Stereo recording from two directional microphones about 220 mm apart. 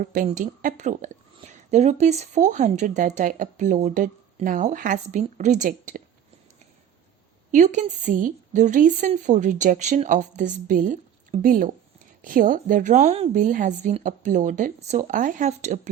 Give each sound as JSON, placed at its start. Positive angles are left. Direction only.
{"t": 0.0, "sound": "a woman's voice", "side_deg": -35}
{"t": 7.5, "sound": "a woman's voice", "side_deg": -35}